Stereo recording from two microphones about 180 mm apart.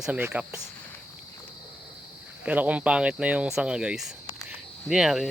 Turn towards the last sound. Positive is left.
turn(degrees=0)  # may be behind; listen again after turning